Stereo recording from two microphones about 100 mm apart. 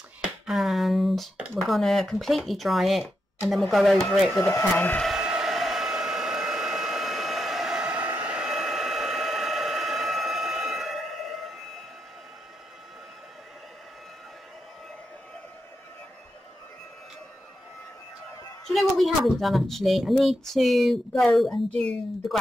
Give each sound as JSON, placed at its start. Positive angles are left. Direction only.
{"t": 0.5, "sound": "speech", "side_deg": 0}
{"t": 4.4, "sound": "speech", "side_deg": 20}
{"t": 5.0, "sound": "hair dryer", "side_deg": -5}
{"t": 18.7, "sound": "speech", "side_deg": 0}